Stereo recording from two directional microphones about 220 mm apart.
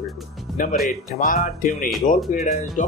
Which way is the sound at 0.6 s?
35° left (ahead or behind).